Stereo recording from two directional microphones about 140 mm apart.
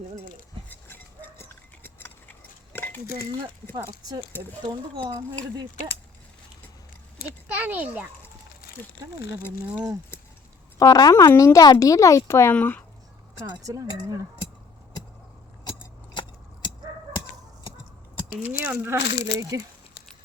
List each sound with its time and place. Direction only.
0.7 s a sound: 15° left (ahead or behind)
4.6 s speech: 30° right (ahead or behind)
7.4 s a child's voice: 10° right (ahead or behind)
10.8 s speech: 25° left (ahead or behind)
13.4 s speech: 25° right (ahead or behind)
18.6 s speech: 10° right (ahead or behind)